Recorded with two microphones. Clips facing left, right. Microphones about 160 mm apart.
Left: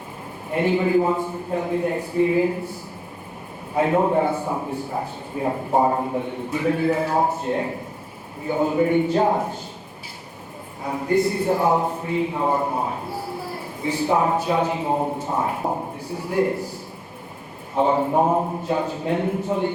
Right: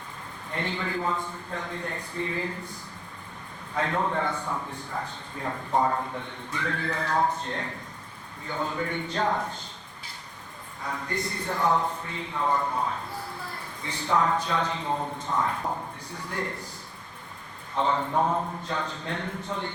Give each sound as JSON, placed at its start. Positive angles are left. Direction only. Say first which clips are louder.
{"t": 0.5, "sound": "speech", "louder": "left 12 dB", "side_deg": 10}
{"t": 3.8, "sound": "a man's voice", "louder": "left 9 dB", "side_deg": 15}
{"t": 5.8, "sound": "a man's voice", "louder": "left 6 dB", "side_deg": 25}
{"t": 6.1, "sound": "speech", "louder": "left 10 dB", "side_deg": 10}
{"t": 10.8, "sound": "a man's voice", "louder": "left 7 dB", "side_deg": 30}
{"t": 11.1, "sound": "speech", "louder": "left 14 dB", "side_deg": 10}
{"t": 12.5, "sound": "a man's voice", "louder": "left 5 dB", "side_deg": 30}
{"t": 12.8, "sound": "a sound", "louder": "left 5 dB", "side_deg": 10}
{"t": 14.4, "sound": "speech", "louder": "left 7 dB", "side_deg": 10}
{"t": 14.9, "sound": "a man's voice", "louder": "left 8 dB", "side_deg": 45}
{"t": 15.6, "sound": "a man's voice", "louder": "left 6 dB", "side_deg": 35}
{"t": 16.0, "sound": "speech", "louder": "left 13 dB", "side_deg": 10}
{"t": 17.7, "sound": "speech", "louder": "left 7 dB", "side_deg": 10}